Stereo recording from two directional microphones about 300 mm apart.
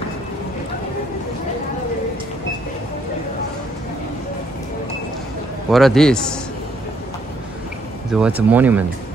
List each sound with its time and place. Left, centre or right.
5.7 s speech: centre
8.1 s speech: centre